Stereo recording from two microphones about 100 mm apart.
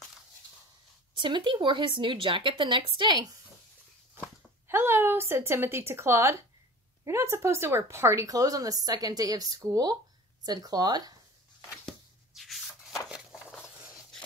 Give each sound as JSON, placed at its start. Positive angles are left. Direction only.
{"t": 1.1, "sound": "speech", "side_deg": -55}
{"t": 4.6, "sound": "a woman's voice", "side_deg": -25}
{"t": 12.4, "sound": "a sound", "side_deg": 0}